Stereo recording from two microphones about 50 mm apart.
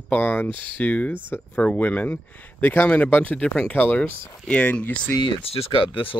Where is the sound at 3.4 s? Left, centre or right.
Centre.